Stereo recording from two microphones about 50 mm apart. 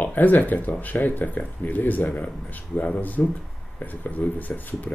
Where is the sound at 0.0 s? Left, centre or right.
Left.